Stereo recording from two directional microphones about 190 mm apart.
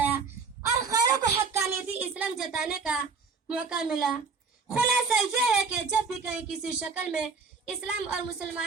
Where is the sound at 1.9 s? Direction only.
5° right (ahead or behind).